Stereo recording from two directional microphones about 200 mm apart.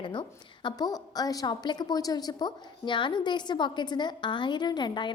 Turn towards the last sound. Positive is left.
turn(degrees=20)  # may be behind; listen again after turning